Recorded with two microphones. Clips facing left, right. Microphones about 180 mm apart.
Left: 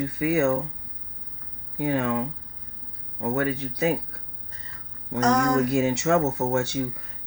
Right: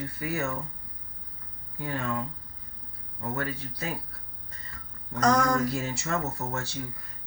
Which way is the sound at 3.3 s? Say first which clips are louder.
Left 8 dB; 65° left (ahead or behind).